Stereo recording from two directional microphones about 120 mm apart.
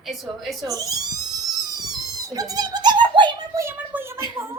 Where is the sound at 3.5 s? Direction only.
25° right (ahead or behind).